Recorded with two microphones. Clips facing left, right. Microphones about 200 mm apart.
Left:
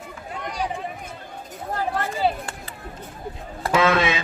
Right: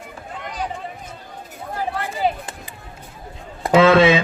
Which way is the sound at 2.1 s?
15° right (ahead or behind).